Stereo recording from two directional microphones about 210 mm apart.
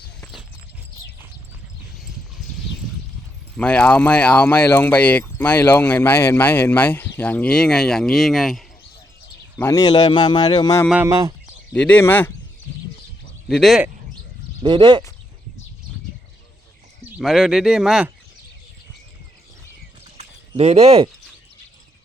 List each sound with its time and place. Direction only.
0.2 s horse: centre (ahead or behind)
2.0 s horse: centre (ahead or behind)
3.6 s speech: 5° left (ahead or behind)
9.6 s a man's voice: 15° left (ahead or behind)
10.8 s speech: 10° right (ahead or behind)
11.7 s speech: 5° left (ahead or behind)
13.5 s speech: centre (ahead or behind)
14.6 s speech: 25° right (ahead or behind)
17.0 s speech: 5° right (ahead or behind)
20.1 s a sound: 30° right (ahead or behind)